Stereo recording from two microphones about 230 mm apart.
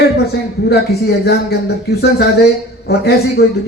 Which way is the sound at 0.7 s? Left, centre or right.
Left.